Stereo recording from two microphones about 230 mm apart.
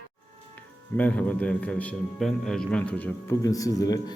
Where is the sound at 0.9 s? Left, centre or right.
Centre.